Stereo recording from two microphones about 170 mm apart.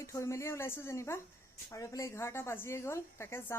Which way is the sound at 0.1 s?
15° left (ahead or behind).